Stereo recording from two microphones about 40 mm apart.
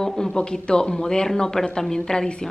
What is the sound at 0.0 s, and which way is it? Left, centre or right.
A man's voice, centre.